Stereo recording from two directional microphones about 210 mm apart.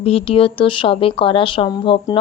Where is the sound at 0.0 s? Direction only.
30° left (ahead or behind).